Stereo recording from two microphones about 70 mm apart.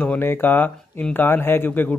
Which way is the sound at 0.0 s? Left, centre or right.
Left.